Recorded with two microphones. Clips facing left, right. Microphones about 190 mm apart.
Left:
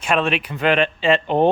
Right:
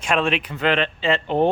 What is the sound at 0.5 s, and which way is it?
Speech, 15° left (ahead or behind).